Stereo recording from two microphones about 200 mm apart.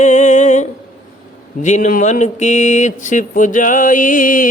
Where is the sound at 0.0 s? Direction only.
35° left (ahead or behind).